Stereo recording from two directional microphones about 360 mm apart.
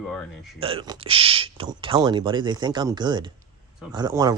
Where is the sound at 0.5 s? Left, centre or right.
Centre.